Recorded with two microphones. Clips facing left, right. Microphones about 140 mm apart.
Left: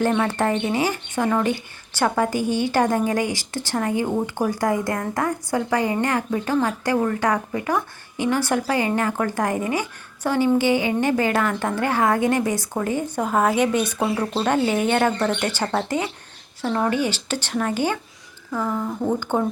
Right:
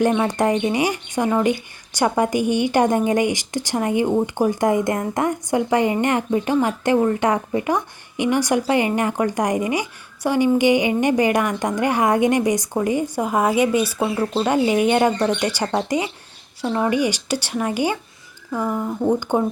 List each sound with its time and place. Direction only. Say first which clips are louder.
0.0 s a woman's voice: right 2 dB; 15° right (ahead or behind)